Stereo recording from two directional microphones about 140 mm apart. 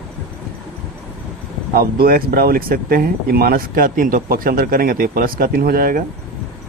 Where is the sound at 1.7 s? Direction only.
90° right.